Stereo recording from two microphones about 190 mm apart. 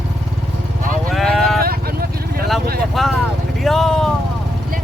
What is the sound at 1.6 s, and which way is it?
Vehicle, 50° right (ahead or behind).